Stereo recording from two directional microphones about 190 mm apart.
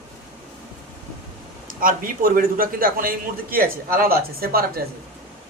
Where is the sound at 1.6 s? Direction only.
45° right (ahead or behind).